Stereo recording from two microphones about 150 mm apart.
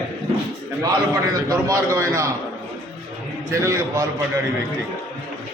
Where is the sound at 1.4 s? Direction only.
20° right (ahead or behind).